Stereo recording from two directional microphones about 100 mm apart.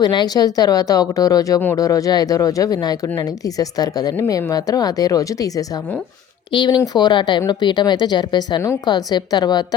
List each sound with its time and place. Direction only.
0.0 s a woman's voice: 45° left (ahead or behind)
6.5 s speech: 55° left (ahead or behind)